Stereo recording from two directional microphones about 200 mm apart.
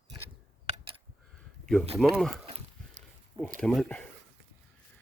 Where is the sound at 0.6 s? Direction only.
30° right (ahead or behind).